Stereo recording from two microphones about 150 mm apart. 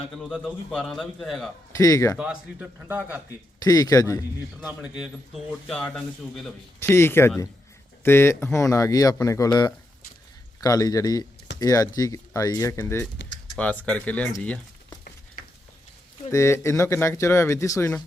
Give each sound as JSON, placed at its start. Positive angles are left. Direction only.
{"t": 0.2, "sound": "a man's voice", "side_deg": 0}
{"t": 1.7, "sound": "speech", "side_deg": 20}
{"t": 2.1, "sound": "a man's voice", "side_deg": -10}
{"t": 3.2, "sound": "speech", "side_deg": 20}
{"t": 4.6, "sound": "a man's voice", "side_deg": -5}
{"t": 6.7, "sound": "speech", "side_deg": 20}
{"t": 14.4, "sound": "crumpling", "side_deg": 10}
{"t": 16.3, "sound": "speech", "side_deg": 20}